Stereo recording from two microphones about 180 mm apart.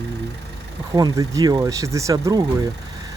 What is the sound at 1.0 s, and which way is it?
Speech, 20° right (ahead or behind).